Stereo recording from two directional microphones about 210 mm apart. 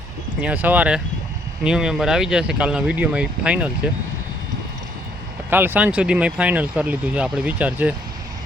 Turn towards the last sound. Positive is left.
turn(degrees=-5)  # may be behind; listen again after turning